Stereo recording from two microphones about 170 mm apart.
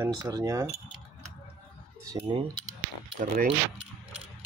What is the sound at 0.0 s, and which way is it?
Speech, 25° right (ahead or behind).